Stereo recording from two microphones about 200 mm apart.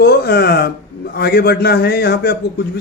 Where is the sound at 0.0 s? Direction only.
55° left (ahead or behind).